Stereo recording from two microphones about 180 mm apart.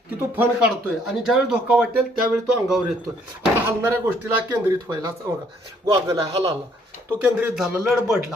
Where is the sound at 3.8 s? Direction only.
15° right (ahead or behind).